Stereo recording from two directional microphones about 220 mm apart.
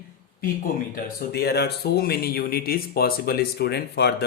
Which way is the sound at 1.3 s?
45° left (ahead or behind).